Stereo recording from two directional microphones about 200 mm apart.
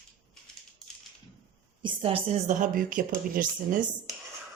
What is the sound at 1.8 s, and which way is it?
Speech, 30° right (ahead or behind).